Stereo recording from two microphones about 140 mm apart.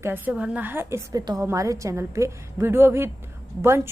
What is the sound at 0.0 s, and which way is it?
A woman's voice, 15° right (ahead or behind).